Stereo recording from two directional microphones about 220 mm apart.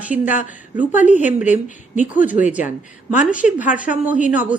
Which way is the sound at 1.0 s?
35° left (ahead or behind).